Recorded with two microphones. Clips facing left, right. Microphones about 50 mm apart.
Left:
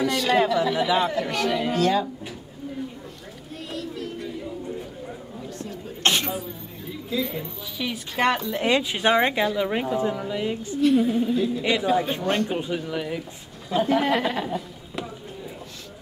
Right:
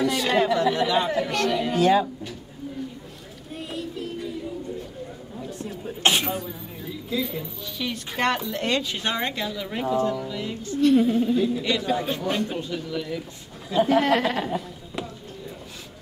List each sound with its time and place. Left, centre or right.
0.1 s speech: centre
0.7 s a woman's voice: centre
1.8 s speech: centre
5.6 s a sound: centre
7.1 s speech: centre
10.8 s a woman's voice: centre
11.6 s speech: centre
12.4 s speech: left
13.7 s a man's voice: centre